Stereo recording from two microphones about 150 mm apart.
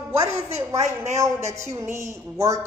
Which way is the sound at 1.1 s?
20° right (ahead or behind).